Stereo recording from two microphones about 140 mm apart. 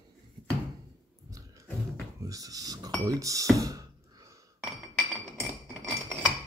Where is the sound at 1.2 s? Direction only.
25° right (ahead or behind).